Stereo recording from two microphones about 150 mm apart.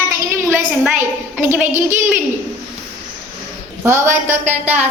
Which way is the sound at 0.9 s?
15° right (ahead or behind).